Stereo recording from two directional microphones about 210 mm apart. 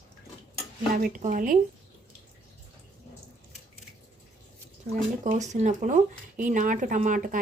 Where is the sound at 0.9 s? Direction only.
40° right (ahead or behind).